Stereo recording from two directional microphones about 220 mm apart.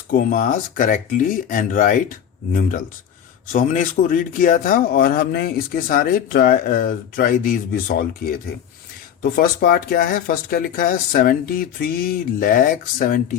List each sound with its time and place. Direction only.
0.1 s speech: 40° left (ahead or behind)